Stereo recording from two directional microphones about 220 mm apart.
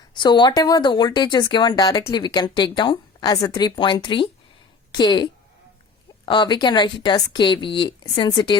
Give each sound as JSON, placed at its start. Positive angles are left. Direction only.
{"t": 0.2, "sound": "a woman's voice", "side_deg": 20}